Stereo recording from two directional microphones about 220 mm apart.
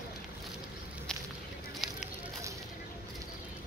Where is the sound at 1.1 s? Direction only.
5° left (ahead or behind).